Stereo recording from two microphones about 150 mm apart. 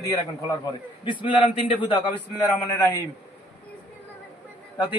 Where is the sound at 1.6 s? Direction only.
35° left (ahead or behind).